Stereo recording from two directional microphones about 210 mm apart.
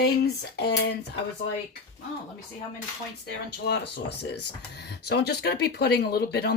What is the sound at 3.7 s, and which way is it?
Speech, 55° left (ahead or behind).